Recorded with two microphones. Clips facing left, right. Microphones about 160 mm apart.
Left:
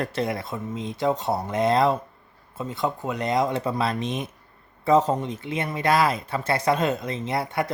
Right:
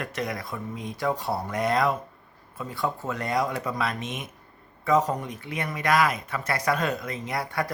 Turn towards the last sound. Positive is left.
turn(degrees=20)  # may be behind; listen again after turning